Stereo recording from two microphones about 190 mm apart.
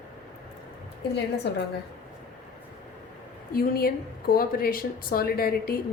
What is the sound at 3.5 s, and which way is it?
Speech, 50° left (ahead or behind).